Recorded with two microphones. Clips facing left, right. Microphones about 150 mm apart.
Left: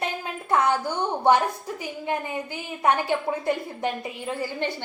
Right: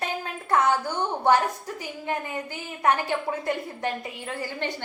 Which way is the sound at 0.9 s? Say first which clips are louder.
Left 1 dB; 15° left (ahead or behind).